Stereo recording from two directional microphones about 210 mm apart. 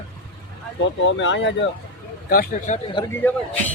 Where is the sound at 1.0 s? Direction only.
60° left (ahead or behind).